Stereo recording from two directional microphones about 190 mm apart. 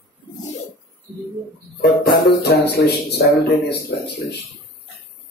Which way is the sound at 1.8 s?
55° left (ahead or behind).